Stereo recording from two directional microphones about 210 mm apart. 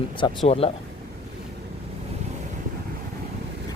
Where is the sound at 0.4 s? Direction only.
25° left (ahead or behind).